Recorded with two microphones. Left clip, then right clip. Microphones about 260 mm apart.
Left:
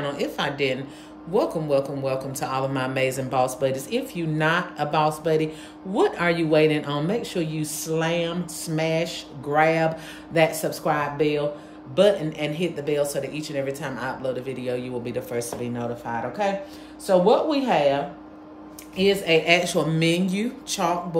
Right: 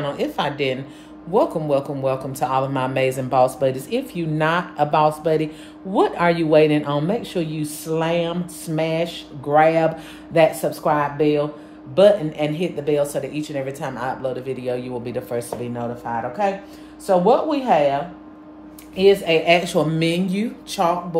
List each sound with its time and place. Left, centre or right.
0.0 s speech: centre
18.9 s speech: centre